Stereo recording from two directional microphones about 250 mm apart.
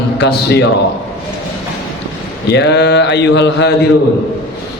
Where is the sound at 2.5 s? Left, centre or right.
Left.